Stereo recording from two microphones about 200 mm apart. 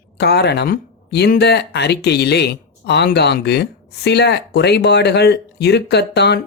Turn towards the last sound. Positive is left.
turn(degrees=55)  # may be behind; listen again after turning